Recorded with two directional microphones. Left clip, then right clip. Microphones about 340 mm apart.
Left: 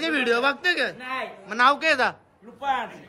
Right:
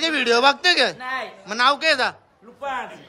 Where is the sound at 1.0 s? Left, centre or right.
Centre.